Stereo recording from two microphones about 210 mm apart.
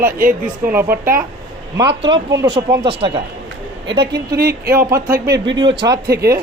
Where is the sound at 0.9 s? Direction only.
45° right (ahead or behind).